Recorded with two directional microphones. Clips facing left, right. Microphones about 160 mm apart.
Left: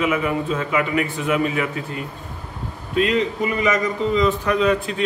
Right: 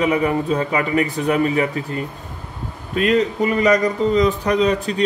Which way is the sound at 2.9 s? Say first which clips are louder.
Right 2 dB; 45° right (ahead or behind).